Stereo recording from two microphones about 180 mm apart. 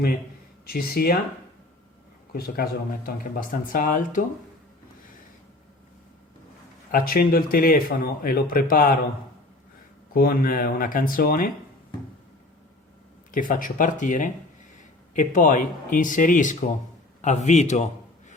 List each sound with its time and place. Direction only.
0.6 s speech: 55° left (ahead or behind)
2.3 s speech: 55° left (ahead or behind)
6.9 s speech: 55° left (ahead or behind)
10.2 s speech: 55° left (ahead or behind)
13.3 s a man's voice: 50° left (ahead or behind)